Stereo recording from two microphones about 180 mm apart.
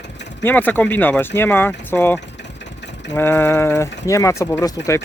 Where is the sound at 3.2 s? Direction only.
15° left (ahead or behind).